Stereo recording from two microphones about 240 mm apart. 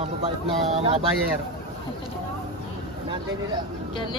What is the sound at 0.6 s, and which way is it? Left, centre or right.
Speech, right.